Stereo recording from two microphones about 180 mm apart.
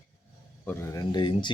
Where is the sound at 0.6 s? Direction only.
10° left (ahead or behind).